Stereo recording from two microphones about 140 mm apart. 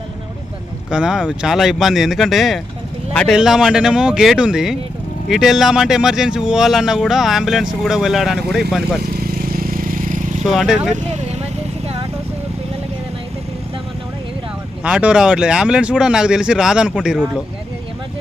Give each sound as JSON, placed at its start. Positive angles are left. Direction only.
{"t": 0.9, "sound": "speech", "side_deg": -5}
{"t": 9.0, "sound": "vehicle", "side_deg": -90}
{"t": 10.4, "sound": "speech", "side_deg": 0}
{"t": 14.8, "sound": "speech", "side_deg": -5}